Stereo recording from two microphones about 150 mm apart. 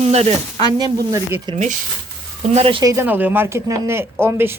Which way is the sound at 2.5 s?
35° right (ahead or behind).